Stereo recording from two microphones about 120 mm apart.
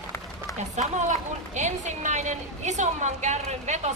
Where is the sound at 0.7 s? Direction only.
80° right.